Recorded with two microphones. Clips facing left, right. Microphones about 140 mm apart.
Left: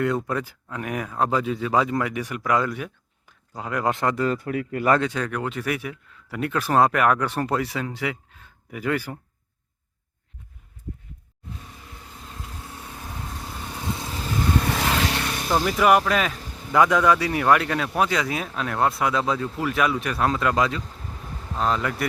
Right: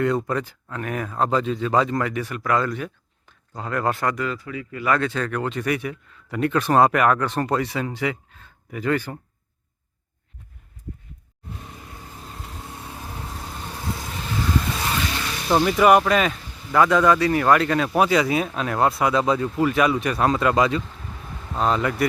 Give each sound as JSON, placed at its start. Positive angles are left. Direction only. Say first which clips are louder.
{"t": 0.0, "sound": "speech", "louder": "right 2 dB", "side_deg": 0}
{"t": 4.3, "sound": "speech", "louder": "left 5 dB", "side_deg": 50}
{"t": 4.9, "sound": "speech", "louder": "right 1 dB", "side_deg": 15}
{"t": 15.0, "sound": "vehicle", "louder": "left 2 dB", "side_deg": 65}
{"t": 15.6, "sound": "speech", "louder": "right 3 dB", "side_deg": 0}
{"t": 16.7, "sound": "speech", "louder": "right 1 dB", "side_deg": 15}